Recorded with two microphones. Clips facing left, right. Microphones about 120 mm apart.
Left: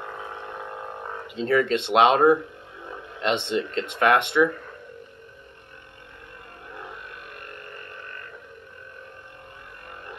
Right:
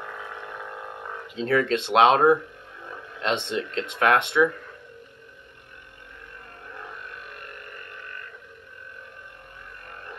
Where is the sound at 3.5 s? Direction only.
Centre (ahead or behind).